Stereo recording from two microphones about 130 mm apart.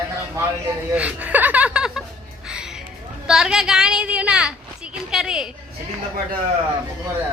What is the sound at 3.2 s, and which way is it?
A woman's voice, 5° right (ahead or behind).